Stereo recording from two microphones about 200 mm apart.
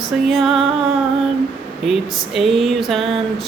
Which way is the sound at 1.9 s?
Centre (ahead or behind).